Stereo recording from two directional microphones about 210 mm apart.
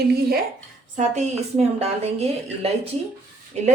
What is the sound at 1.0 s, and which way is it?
A woman's voice, 30° right (ahead or behind).